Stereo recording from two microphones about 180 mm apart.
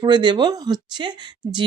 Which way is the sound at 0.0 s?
25° right (ahead or behind).